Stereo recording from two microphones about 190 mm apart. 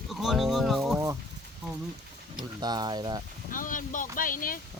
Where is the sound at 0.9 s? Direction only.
15° right (ahead or behind).